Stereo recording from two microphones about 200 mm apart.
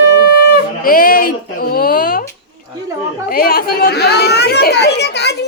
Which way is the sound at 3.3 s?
45° left (ahead or behind).